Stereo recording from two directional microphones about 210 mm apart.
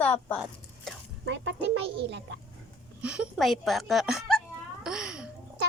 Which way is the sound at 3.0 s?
5° right (ahead or behind).